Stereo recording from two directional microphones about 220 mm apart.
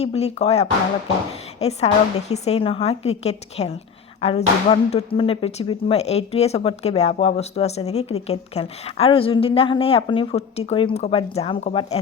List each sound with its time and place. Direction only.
0.0 s speech: 30° left (ahead or behind)